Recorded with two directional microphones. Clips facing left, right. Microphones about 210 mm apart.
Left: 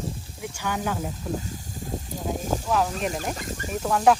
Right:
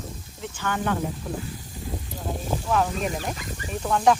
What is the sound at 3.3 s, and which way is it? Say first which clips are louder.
Speech: left 2 dB; 45° left (ahead or behind).